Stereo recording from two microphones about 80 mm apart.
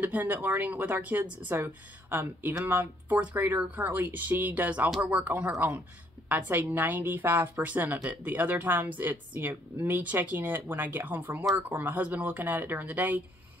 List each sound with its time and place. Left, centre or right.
0.0 s a woman's voice: right